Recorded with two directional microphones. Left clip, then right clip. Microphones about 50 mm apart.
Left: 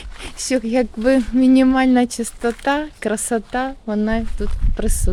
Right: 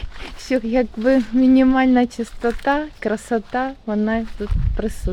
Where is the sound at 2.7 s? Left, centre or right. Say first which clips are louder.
Even; left.